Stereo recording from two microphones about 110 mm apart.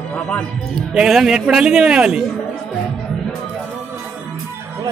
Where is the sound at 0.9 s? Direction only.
5° right (ahead or behind).